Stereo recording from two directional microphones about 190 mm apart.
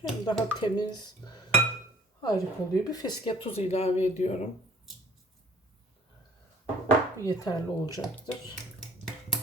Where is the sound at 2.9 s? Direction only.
25° left (ahead or behind).